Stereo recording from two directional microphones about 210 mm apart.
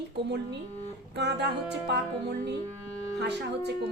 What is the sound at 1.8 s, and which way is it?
Music, 55° right (ahead or behind).